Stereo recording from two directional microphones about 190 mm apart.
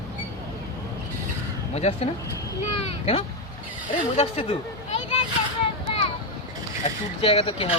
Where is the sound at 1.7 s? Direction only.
35° left (ahead or behind).